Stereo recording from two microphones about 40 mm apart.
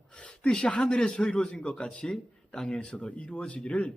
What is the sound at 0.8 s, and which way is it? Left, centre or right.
Speech, left.